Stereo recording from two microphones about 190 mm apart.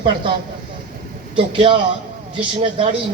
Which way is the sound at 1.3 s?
25° right (ahead or behind).